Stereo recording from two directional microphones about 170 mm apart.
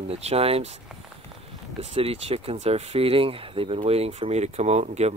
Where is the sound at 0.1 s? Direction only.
35° right (ahead or behind).